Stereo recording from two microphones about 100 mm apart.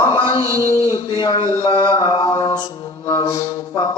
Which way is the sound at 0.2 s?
45° left (ahead or behind).